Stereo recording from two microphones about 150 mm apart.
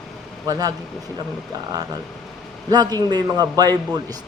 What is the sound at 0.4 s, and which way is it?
Speech, 25° right (ahead or behind).